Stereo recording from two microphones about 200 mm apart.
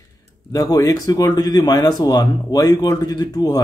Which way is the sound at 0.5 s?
15° left (ahead or behind).